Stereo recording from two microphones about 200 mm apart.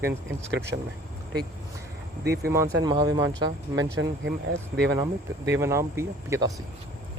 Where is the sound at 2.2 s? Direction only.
55° right (ahead or behind).